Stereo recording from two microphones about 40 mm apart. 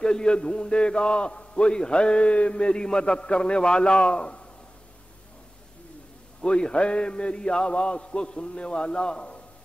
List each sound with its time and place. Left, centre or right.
0.0 s a man's voice: left
6.4 s a man's voice: left